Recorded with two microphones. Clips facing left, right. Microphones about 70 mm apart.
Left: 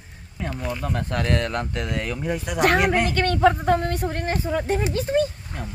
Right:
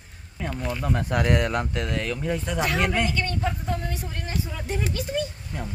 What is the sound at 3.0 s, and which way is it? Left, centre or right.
Speech, left.